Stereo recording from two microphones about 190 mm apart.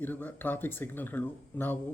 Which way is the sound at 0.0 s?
10° left (ahead or behind).